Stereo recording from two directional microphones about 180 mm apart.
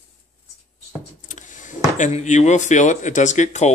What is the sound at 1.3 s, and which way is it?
Speech, 45° left (ahead or behind).